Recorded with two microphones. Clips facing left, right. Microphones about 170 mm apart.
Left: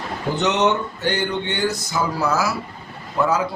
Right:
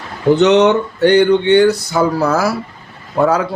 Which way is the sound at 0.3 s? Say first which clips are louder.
Right 8 dB; 70° right (ahead or behind).